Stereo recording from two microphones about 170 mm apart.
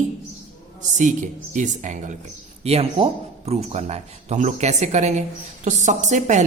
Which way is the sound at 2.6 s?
35° right (ahead or behind).